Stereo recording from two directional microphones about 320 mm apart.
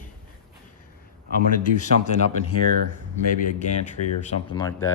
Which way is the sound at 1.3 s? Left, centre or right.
Left.